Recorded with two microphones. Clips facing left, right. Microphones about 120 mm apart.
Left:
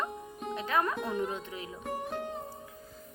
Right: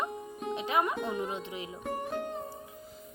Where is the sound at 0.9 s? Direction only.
Centre (ahead or behind).